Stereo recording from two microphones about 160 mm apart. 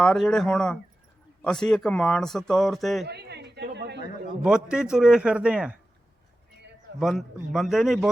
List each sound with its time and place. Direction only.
0.0 s a man's voice: 5° left (ahead or behind)
3.1 s a woman's voice: 90° right
4.4 s a man's voice: 5° right (ahead or behind)
7.0 s a man's voice: centre (ahead or behind)